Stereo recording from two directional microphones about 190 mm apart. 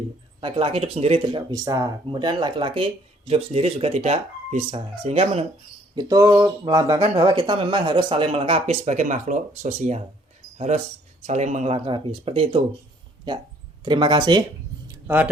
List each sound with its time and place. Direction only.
0.3 s speech: 25° right (ahead or behind)
5.9 s speech: 20° right (ahead or behind); by 10.0 s 35° right (ahead or behind)
11.3 s speech: 40° right (ahead or behind); by 14.4 s 25° right (ahead or behind)
15.0 s speech: 10° right (ahead or behind)